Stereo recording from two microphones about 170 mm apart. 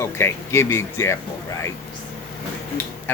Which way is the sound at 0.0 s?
15° left (ahead or behind).